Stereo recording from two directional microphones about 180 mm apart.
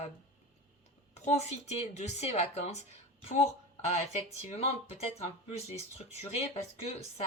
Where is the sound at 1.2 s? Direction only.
40° left (ahead or behind).